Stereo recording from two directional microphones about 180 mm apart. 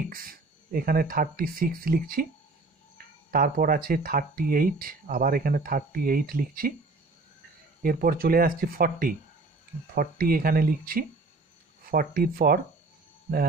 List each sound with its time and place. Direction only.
0.1 s speech: 55° right (ahead or behind)
3.3 s speech: 55° right (ahead or behind)
7.8 s speech: 55° right (ahead or behind)